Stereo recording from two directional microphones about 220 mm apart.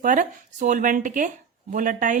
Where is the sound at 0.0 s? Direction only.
35° right (ahead or behind).